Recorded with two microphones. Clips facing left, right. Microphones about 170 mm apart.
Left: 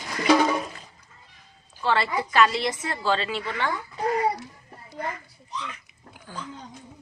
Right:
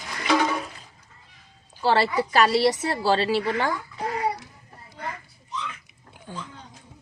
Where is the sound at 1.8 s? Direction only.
35° right (ahead or behind).